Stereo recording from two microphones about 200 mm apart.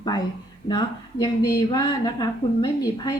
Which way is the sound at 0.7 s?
20° left (ahead or behind).